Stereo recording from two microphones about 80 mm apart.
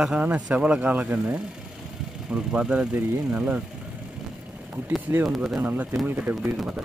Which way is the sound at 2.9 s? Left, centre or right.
Right.